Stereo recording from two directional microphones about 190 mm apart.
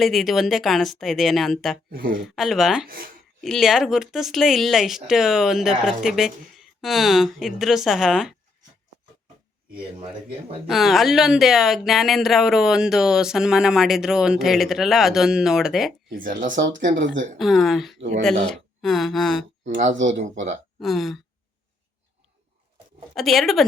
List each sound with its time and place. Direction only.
0.0 s speech: centre (ahead or behind)
1.9 s speech: 50° right (ahead or behind)
2.2 s speech: centre (ahead or behind)
2.8 s speech: 50° right (ahead or behind)
3.4 s speech: centre (ahead or behind)
10.0 s speech: 30° right (ahead or behind)
10.7 s speech: centre (ahead or behind)
16.0 s speech: 45° right (ahead or behind)
16.9 s speech: 70° right (ahead or behind)
17.3 s speech: centre (ahead or behind)
19.6 s speech: 40° right (ahead or behind)
20.7 s speech: centre (ahead or behind)
23.1 s speech: centre (ahead or behind)